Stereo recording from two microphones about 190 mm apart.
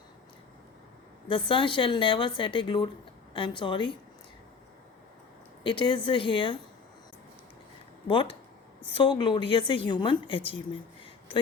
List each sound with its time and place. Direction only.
1.3 s a woman's voice: 25° left (ahead or behind)
5.6 s a woman's voice: 25° left (ahead or behind)
8.0 s a woman's voice: 25° left (ahead or behind)